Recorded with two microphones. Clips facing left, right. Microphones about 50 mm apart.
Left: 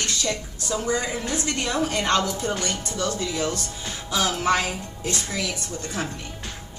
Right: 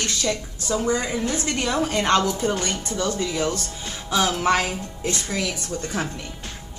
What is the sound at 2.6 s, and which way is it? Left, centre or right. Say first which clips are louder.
A woman's voice: right 2 dB; right.